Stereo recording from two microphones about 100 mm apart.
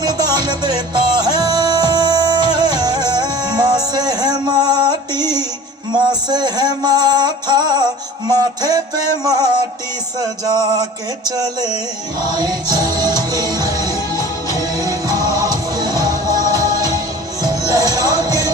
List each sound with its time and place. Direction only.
0.0 s music: 40° right (ahead or behind)